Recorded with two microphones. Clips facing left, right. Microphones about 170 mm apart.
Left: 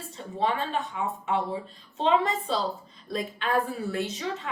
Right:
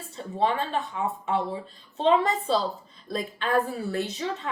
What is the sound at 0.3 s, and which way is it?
Speech, 35° right (ahead or behind).